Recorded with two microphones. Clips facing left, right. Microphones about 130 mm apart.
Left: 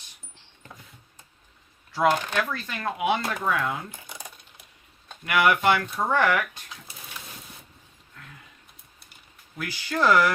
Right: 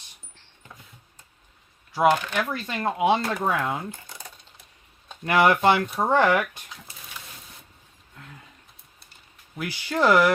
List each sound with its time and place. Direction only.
2.0 s speech: 15° right (ahead or behind)
5.2 s speech: 30° right (ahead or behind)
9.6 s speech: 20° right (ahead or behind)